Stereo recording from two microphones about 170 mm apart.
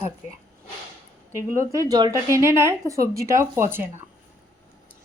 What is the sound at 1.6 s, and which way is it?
Speech, 20° right (ahead or behind).